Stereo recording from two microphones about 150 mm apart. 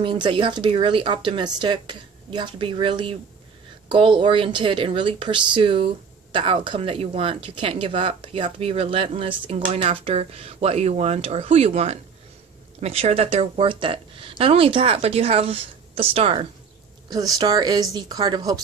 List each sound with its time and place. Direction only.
0.0 s speech: 35° right (ahead or behind)
17.1 s speech: 25° right (ahead or behind)